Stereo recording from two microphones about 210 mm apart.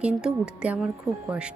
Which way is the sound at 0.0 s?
5° right (ahead or behind).